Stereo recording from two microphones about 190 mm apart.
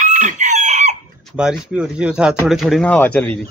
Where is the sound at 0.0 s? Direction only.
40° right (ahead or behind).